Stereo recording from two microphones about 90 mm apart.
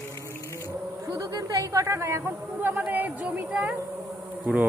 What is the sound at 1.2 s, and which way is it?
Speech, 45° right (ahead or behind).